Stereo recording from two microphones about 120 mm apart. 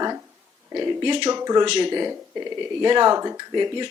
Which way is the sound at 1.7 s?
40° right (ahead or behind).